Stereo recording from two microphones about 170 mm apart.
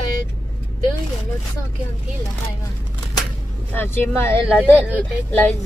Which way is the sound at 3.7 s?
10° left (ahead or behind).